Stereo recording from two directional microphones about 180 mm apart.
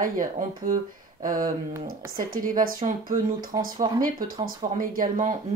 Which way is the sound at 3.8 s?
20° right (ahead or behind).